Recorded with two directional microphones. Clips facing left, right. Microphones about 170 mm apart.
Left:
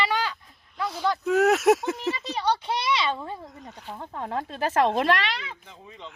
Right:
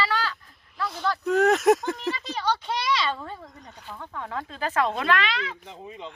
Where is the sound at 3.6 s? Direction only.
Centre (ahead or behind).